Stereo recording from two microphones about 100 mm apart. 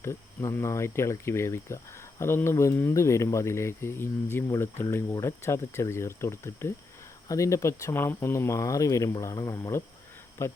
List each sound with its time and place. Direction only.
0.0 s speech: 25° left (ahead or behind)